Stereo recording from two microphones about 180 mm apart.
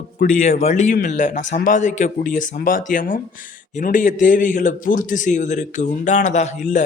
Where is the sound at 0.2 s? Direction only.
45° left (ahead or behind).